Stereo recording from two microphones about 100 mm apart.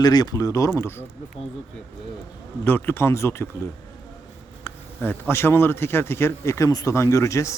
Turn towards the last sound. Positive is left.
turn(degrees=30)  # may be behind; listen again after turning